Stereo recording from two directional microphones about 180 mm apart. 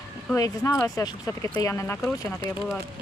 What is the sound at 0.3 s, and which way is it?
Speech, 20° left (ahead or behind).